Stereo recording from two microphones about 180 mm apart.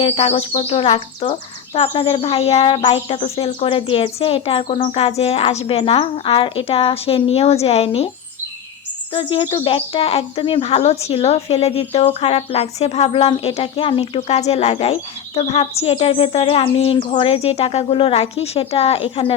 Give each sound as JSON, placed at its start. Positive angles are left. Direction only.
{"t": 0.0, "sound": "speech", "side_deg": 35}
{"t": 9.1, "sound": "speech", "side_deg": 30}